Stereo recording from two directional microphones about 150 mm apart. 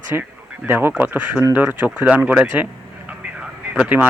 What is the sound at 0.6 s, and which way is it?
Speech, 15° right (ahead or behind).